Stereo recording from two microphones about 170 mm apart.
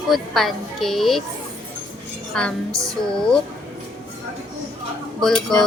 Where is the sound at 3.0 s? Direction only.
5° left (ahead or behind).